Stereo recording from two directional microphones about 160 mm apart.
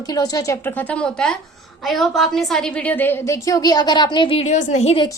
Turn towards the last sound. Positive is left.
turn(degrees=40)  # may be behind; listen again after turning